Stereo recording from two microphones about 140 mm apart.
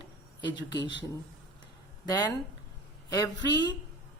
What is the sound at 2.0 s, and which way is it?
A woman's voice, 30° left (ahead or behind).